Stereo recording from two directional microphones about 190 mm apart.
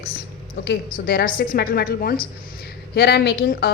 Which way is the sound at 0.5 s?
60° left (ahead or behind).